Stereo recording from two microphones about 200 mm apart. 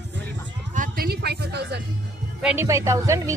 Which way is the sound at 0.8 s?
50° right (ahead or behind).